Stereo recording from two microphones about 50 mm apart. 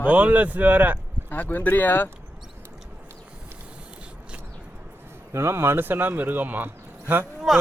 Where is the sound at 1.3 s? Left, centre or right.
Left.